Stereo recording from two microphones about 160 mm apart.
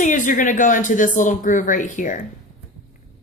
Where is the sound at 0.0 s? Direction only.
55° left (ahead or behind).